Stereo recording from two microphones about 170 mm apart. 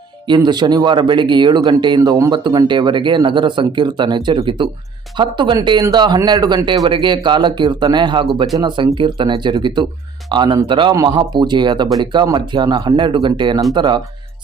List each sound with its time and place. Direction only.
0.3 s speech: 25° right (ahead or behind)